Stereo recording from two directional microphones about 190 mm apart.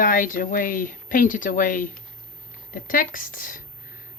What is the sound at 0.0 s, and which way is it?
Speech, 45° left (ahead or behind).